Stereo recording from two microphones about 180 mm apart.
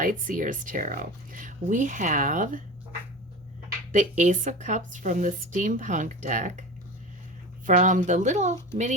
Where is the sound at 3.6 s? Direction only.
45° right (ahead or behind).